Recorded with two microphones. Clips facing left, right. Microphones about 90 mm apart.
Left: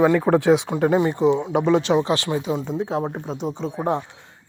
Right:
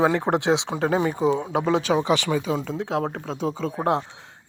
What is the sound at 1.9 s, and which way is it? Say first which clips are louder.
Speech: left 1 dB; 60° right (ahead or behind).